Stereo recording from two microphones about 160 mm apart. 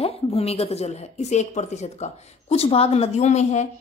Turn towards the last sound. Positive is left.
turn(degrees=45)  # may be behind; listen again after turning